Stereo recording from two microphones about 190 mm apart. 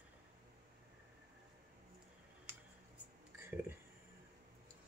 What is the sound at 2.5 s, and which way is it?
Tick, 10° right (ahead or behind).